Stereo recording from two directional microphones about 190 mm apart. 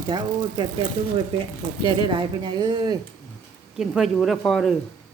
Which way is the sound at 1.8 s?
25° right (ahead or behind).